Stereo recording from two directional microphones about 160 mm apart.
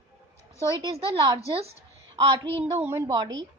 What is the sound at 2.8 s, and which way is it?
Speech, 15° right (ahead or behind).